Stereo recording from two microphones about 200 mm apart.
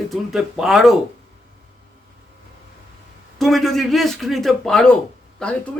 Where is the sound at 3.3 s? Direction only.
Centre (ahead or behind).